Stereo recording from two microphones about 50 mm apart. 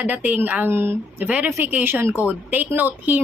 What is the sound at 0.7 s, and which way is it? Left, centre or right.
Speech, right.